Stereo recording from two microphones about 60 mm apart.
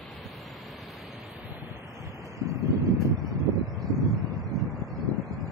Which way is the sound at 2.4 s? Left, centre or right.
Right.